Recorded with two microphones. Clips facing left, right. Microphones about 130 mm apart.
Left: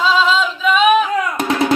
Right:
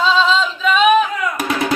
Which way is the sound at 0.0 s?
5° left (ahead or behind).